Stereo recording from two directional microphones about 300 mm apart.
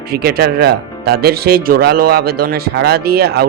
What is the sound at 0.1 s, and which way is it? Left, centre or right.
Speech, right.